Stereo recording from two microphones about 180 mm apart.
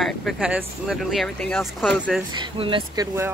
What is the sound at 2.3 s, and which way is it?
Speech, 30° right (ahead or behind).